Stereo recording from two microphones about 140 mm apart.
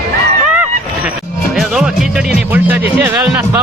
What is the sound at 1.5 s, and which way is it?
Speech, 5° right (ahead or behind).